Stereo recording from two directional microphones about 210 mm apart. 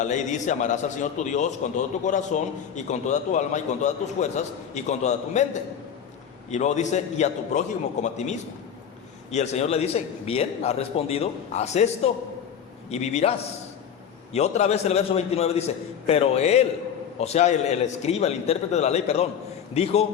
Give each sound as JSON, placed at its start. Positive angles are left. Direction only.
{"t": 0.0, "sound": "a man's voice", "side_deg": 35}
{"t": 6.5, "sound": "a man's voice", "side_deg": 35}
{"t": 14.3, "sound": "a man's voice", "side_deg": 30}